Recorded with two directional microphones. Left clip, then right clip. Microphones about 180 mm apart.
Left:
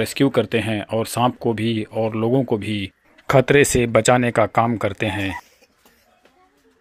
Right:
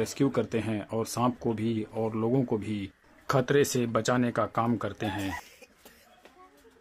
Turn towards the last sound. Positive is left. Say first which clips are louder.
# left 10 dB
turn(degrees=25)  # may be behind; listen again after turning